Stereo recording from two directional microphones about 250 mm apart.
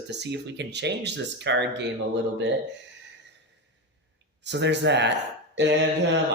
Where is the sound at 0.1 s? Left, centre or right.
Right.